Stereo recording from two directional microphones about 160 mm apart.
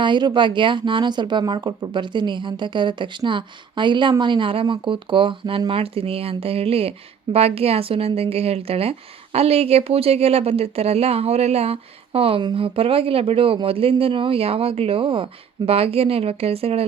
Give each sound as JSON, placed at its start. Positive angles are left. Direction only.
{"t": 0.0, "sound": "speech", "side_deg": -30}